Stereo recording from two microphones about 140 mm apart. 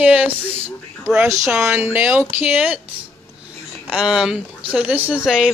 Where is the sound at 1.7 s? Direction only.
15° right (ahead or behind).